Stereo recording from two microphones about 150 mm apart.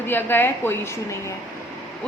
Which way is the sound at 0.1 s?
15° left (ahead or behind).